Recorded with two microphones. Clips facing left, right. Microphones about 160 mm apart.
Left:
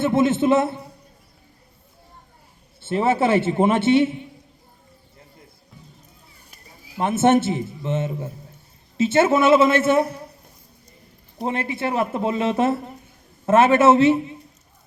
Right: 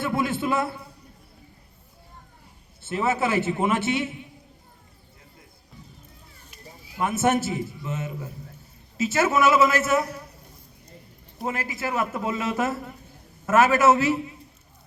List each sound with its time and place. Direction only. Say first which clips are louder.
0.0 s speech: left 8 dB; 25° left (ahead or behind)
2.8 s speech: left 5 dB; 30° left (ahead or behind)
6.9 s speech: left 5 dB; 30° left (ahead or behind)
11.3 s speech: left 5 dB; 30° left (ahead or behind)